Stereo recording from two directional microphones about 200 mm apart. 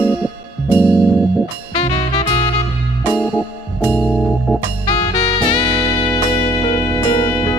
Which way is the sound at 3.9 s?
5° left (ahead or behind).